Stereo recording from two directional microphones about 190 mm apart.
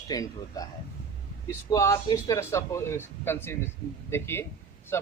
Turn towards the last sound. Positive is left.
turn(degrees=15)  # may be behind; listen again after turning